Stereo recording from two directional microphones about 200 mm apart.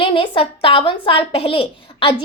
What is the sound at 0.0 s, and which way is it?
A child's voice, 25° left (ahead or behind).